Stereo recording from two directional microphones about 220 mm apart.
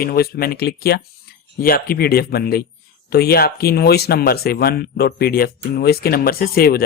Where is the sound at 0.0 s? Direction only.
45° left (ahead or behind).